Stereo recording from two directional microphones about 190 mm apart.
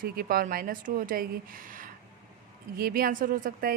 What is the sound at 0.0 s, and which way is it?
Speech, 50° right (ahead or behind).